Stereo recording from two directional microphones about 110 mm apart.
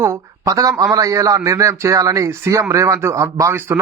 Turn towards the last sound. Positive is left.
turn(degrees=-20)  # may be behind; listen again after turning